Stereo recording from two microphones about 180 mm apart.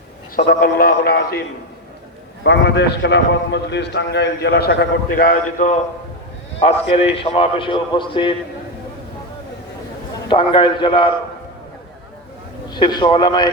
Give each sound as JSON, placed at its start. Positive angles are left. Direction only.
{"t": 0.3, "sound": "a man's voice", "side_deg": 55}
{"t": 2.4, "sound": "a man's voice", "side_deg": 75}
{"t": 6.6, "sound": "a man's voice", "side_deg": 35}
{"t": 10.2, "sound": "a man's voice", "side_deg": 25}
{"t": 12.7, "sound": "a man's voice", "side_deg": 25}